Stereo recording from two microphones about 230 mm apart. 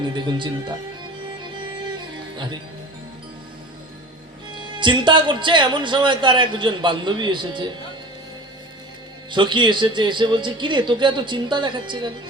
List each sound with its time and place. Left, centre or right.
0.0 s a man's voice: centre
4.5 s a man's voice: right
9.3 s a man's voice: centre